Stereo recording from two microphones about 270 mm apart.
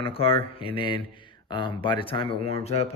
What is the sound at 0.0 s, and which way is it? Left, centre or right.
Speech, left.